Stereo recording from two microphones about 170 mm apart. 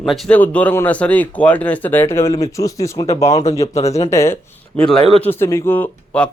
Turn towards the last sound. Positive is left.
turn(degrees=10)  # may be behind; listen again after turning